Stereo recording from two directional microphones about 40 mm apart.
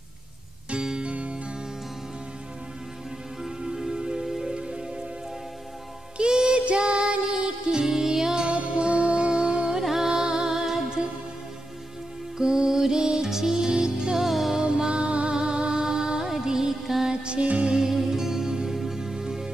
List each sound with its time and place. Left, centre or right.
0.7 s music: centre
1.1 s music: right
3.4 s music: centre
4.3 s music: centre
4.6 s music: right
6.1 s music: right
8.5 s music: right
9.8 s music: centre
12.4 s music: centre
14.2 s music: centre
14.6 s music: right; by 17.1 s centre
17.1 s music: right
17.7 s music: centre